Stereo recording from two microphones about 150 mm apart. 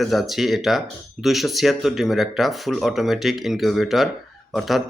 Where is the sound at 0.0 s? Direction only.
Centre (ahead or behind).